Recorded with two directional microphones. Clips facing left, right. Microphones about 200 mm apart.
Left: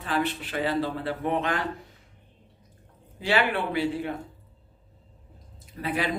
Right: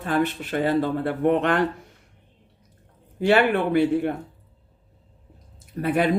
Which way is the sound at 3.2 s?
50° right (ahead or behind).